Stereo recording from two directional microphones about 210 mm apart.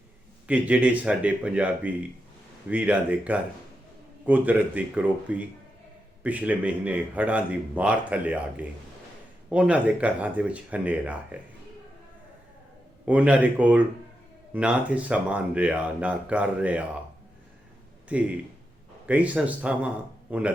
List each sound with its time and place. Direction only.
0.4 s speech: 5° right (ahead or behind)
13.1 s speech: 5° right (ahead or behind)
18.1 s speech: 5° right (ahead or behind)